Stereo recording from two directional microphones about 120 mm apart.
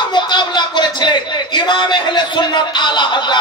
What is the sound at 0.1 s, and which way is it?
A man's voice, 40° left (ahead or behind).